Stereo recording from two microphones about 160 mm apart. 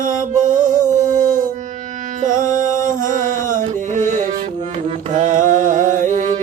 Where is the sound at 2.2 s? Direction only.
55° right (ahead or behind).